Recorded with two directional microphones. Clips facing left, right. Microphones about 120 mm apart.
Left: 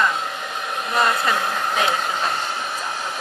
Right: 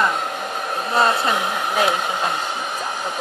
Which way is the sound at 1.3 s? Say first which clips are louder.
Right 2 dB; 10° right (ahead or behind).